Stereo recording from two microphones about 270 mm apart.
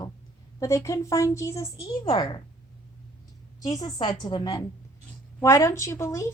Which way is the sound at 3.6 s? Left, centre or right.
Centre.